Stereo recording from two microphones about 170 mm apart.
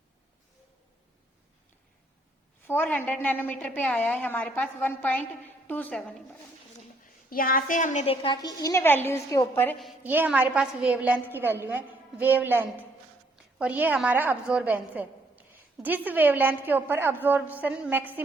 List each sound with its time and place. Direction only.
2.6 s a woman's voice: 10° left (ahead or behind)
7.3 s a woman's voice: 60° left (ahead or behind)
8.0 s a woman's voice: 35° left (ahead or behind); by 9.7 s 15° left (ahead or behind)
10.0 s a woman's voice: 10° right (ahead or behind)